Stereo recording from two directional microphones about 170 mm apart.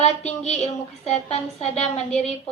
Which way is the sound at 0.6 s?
40° left (ahead or behind).